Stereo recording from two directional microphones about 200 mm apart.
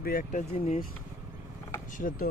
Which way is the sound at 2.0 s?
45° left (ahead or behind).